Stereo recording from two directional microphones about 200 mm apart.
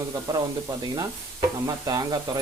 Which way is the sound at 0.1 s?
15° right (ahead or behind).